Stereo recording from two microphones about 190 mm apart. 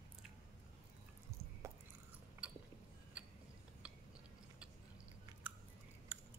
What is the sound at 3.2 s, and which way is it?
Mechanisms, 5° right (ahead or behind).